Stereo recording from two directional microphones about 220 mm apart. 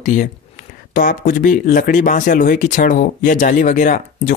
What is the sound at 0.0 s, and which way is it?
Speech, 35° left (ahead or behind).